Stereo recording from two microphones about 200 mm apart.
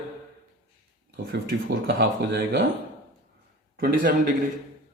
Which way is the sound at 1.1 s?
50° right (ahead or behind).